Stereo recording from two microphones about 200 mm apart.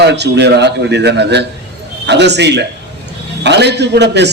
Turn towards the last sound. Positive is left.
turn(degrees=-60)  # may be behind; listen again after turning